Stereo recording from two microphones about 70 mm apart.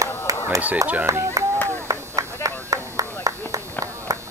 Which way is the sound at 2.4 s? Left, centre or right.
Left.